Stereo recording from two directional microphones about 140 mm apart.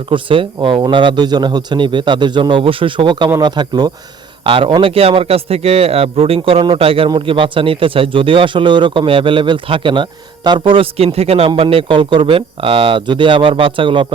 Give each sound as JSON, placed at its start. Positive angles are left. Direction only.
{"t": 0.1, "sound": "a man's voice", "side_deg": -35}